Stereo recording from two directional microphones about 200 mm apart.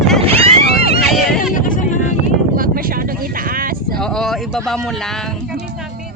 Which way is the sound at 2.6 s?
45° right (ahead or behind).